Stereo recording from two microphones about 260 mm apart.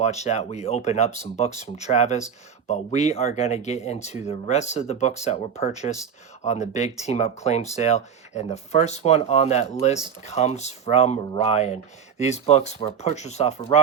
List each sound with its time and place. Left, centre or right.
0.0 s speech: left